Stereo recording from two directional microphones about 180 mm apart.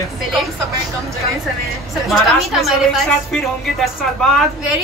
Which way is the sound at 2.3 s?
Centre (ahead or behind).